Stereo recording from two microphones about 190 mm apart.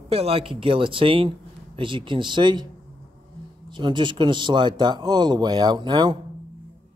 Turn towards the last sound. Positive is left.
turn(degrees=-25)  # may be behind; listen again after turning